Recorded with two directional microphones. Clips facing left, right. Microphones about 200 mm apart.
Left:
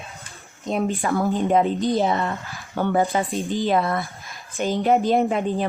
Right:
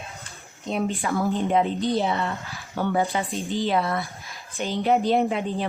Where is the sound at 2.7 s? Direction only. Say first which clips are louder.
Left 3 dB; 55° left (ahead or behind).